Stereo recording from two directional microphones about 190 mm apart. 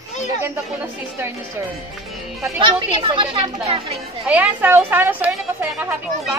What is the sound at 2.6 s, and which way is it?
Speech, 25° right (ahead or behind).